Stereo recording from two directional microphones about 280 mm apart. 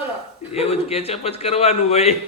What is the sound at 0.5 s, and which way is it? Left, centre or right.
A man's voice, left.